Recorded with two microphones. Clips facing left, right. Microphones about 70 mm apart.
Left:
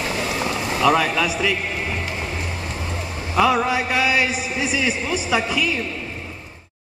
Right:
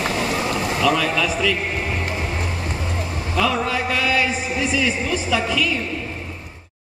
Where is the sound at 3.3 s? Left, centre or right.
Centre.